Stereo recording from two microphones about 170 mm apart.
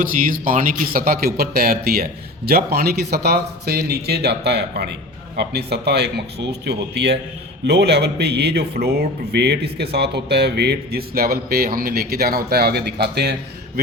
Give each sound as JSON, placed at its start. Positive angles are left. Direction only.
{"t": 0.0, "sound": "a man's voice", "side_deg": -55}